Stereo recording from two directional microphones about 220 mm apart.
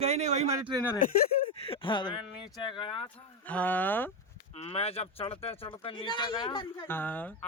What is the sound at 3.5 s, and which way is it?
Speech, 5° left (ahead or behind).